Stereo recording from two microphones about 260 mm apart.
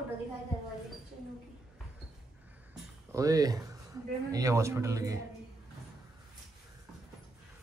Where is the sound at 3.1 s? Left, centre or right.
Centre.